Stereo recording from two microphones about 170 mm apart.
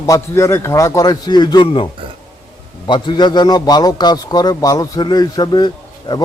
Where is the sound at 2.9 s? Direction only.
25° left (ahead or behind).